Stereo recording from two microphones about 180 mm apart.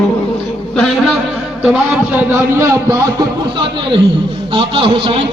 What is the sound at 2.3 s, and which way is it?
A man's voice, 15° right (ahead or behind).